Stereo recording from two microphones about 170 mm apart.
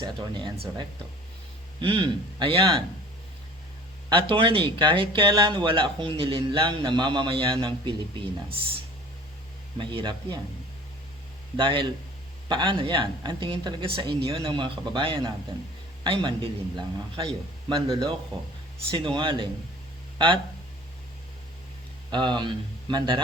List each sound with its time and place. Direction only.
0.0 s speech: 30° right (ahead or behind)
4.1 s speech: 30° right (ahead or behind)
9.7 s speech: 25° right (ahead or behind)
11.5 s speech: 30° right (ahead or behind)
22.1 s speech: 25° right (ahead or behind)